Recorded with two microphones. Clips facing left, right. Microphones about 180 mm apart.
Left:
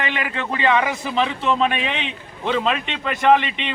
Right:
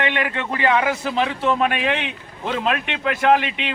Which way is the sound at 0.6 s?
10° right (ahead or behind).